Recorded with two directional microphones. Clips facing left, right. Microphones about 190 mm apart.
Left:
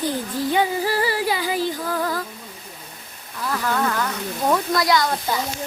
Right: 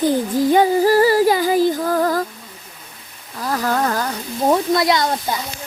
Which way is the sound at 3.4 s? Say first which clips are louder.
Right 3 dB; 40° right (ahead or behind).